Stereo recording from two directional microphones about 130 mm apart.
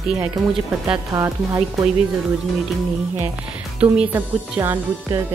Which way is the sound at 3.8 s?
10° right (ahead or behind).